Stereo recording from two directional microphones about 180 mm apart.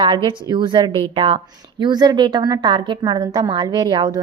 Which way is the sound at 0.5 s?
25° right (ahead or behind).